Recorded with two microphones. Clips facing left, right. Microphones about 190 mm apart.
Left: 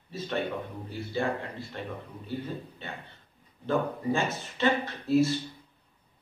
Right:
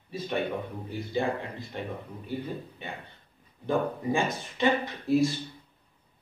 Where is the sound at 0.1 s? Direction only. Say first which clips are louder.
Right 1 dB; 15° right (ahead or behind).